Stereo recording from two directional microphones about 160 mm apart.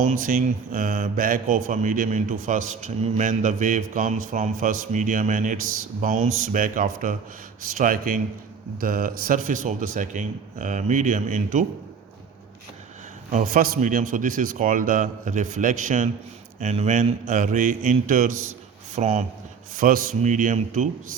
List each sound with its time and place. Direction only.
0.2 s a man's voice: 60° right (ahead or behind)
13.3 s a man's voice: 55° right (ahead or behind)
19.7 s speech: 60° right (ahead or behind)